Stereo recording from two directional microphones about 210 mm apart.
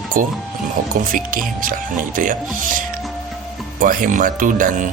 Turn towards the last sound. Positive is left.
turn(degrees=-40)  # may be behind; listen again after turning